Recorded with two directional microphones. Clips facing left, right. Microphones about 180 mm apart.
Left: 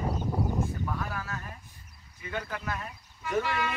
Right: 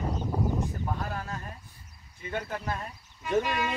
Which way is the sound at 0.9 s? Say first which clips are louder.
Right 1 dB; 35° right (ahead or behind).